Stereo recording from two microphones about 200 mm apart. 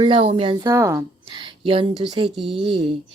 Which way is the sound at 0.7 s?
15° right (ahead or behind).